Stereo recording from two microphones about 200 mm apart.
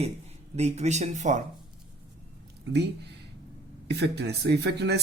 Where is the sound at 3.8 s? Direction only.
55° right (ahead or behind).